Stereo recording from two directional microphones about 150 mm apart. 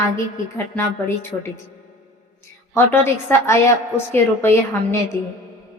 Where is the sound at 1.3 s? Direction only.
20° left (ahead or behind).